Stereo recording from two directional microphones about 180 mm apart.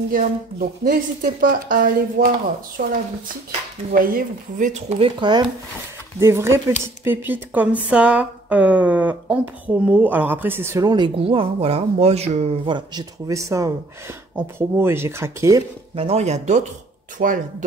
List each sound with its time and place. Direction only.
0.1 s speech: 50° right (ahead or behind)
3.9 s speech: 50° right (ahead or behind); by 5.4 s 30° right (ahead or behind)
6.1 s speech: 15° right (ahead or behind)
15.9 s speech: 35° right (ahead or behind)